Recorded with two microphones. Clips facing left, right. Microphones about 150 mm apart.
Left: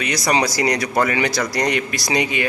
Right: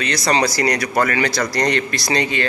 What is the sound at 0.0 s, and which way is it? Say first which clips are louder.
A man's voice: right 1 dB; 15° left (ahead or behind).